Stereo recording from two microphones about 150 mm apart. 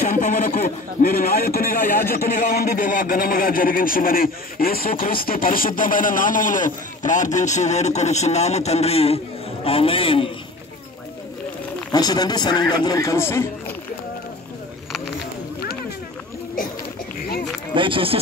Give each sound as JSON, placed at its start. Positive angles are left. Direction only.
{"t": 0.1, "sound": "a man's voice", "side_deg": 60}
{"t": 11.9, "sound": "speech", "side_deg": 25}
{"t": 17.7, "sound": "speech", "side_deg": -35}